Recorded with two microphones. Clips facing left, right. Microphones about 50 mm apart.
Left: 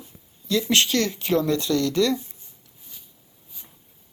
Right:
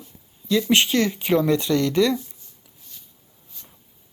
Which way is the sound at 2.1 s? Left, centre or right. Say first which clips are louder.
Right 1 dB; left.